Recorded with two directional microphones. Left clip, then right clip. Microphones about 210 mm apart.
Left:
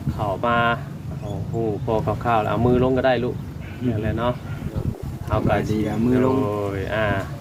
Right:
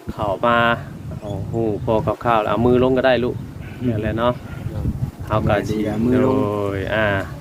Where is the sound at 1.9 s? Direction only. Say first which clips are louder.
Right 4 dB; 50° right (ahead or behind).